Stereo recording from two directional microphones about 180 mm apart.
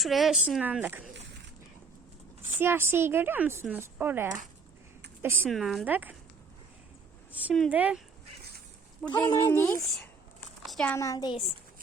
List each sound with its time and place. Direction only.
0.0 s a woman's voice: centre (ahead or behind)
2.6 s speech: 10° right (ahead or behind)
5.5 s a woman's voice: centre (ahead or behind)
7.3 s a sound: 10° right (ahead or behind)
7.5 s a woman's voice: centre (ahead or behind)
9.2 s speech: 15° left (ahead or behind)
10.7 s a sound: 5° left (ahead or behind)
10.9 s a woman's voice: 20° left (ahead or behind)